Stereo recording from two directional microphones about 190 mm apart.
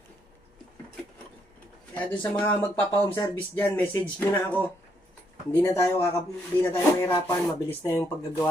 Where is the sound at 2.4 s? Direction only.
10° left (ahead or behind).